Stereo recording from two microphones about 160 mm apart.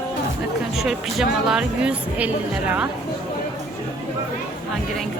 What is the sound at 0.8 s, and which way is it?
Speech, centre (ahead or behind).